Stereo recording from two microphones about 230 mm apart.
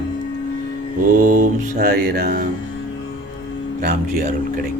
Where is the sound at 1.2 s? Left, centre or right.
Right.